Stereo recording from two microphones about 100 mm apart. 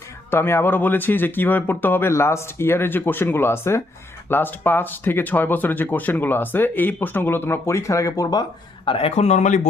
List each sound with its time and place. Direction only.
0.3 s speech: 25° left (ahead or behind); by 8.9 s 45° left (ahead or behind)
8.9 s speech: 80° left